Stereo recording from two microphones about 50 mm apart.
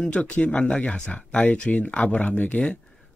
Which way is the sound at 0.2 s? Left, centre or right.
Left.